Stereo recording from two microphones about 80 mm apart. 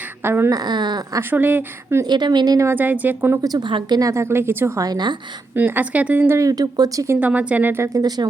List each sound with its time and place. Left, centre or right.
0.2 s speech: right
0.5 s speech: right
1.3 s a woman's voice: right
2.0 s speech: right
2.7 s a woman's voice: right
3.6 s a woman's voice: right
4.1 s speech: right
4.8 s speech: right
5.5 s a woman's voice: right
6.3 s speech: right
7.2 s a woman's voice: centre
7.9 s speech: right